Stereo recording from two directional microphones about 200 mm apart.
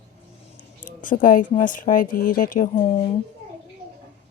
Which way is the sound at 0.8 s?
40° left (ahead or behind).